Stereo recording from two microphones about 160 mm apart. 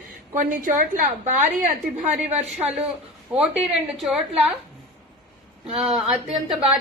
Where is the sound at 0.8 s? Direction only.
55° right (ahead or behind).